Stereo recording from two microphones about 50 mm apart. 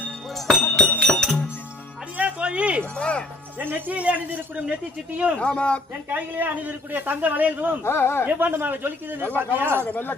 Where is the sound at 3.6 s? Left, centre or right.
Right.